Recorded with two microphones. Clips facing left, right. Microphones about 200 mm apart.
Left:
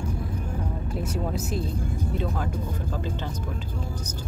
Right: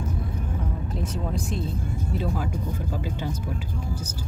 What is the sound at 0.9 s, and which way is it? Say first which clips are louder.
Speech: left 2 dB; 5° left (ahead or behind).